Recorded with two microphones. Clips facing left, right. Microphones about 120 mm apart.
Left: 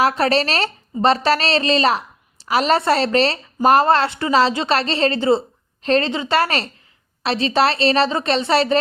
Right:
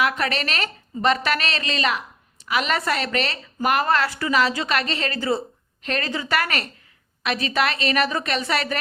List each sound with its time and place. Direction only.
0.0 s a woman's voice: 35° left (ahead or behind)